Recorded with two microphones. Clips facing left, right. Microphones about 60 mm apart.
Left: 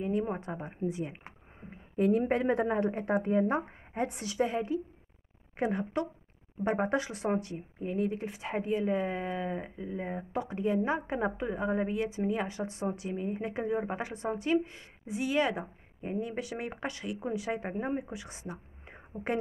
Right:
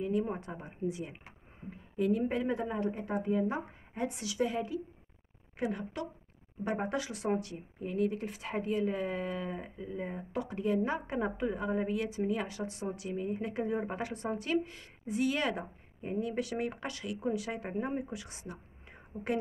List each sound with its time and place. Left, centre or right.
0.4 s speech: left
2.0 s speech: left